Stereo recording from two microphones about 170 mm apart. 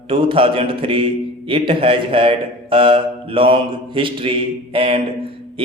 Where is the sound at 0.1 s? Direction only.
30° right (ahead or behind).